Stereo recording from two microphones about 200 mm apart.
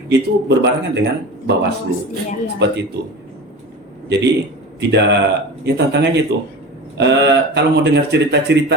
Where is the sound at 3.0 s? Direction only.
55° right (ahead or behind).